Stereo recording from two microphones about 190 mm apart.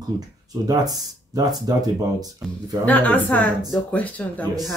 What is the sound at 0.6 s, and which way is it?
Speech, 20° right (ahead or behind).